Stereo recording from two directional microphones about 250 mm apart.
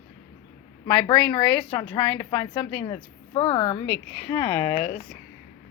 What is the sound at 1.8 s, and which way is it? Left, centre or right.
Speech, centre.